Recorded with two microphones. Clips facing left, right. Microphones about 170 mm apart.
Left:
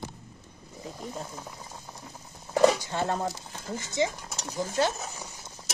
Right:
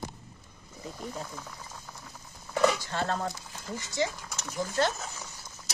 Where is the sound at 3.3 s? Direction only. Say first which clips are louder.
Left 3 dB; 35° left (ahead or behind).